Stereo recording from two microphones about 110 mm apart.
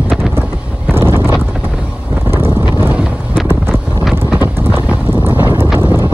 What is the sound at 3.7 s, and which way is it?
Wind noise, 5° left (ahead or behind).